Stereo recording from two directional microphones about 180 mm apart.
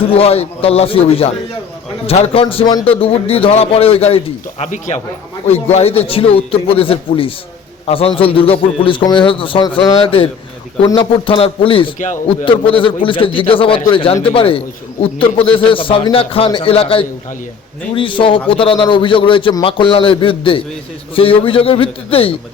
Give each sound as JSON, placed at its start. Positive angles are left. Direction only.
{"t": 0.2, "sound": "a man's voice", "side_deg": 35}
{"t": 11.9, "sound": "a man's voice", "side_deg": 45}
{"t": 12.5, "sound": "a man's voice", "side_deg": 30}